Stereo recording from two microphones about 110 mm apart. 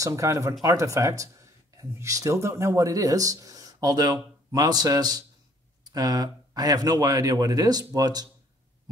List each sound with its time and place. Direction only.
0.0 s speech: 30° right (ahead or behind)